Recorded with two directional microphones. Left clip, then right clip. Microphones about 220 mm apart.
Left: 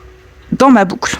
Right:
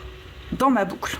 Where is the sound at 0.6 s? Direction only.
50° left (ahead or behind).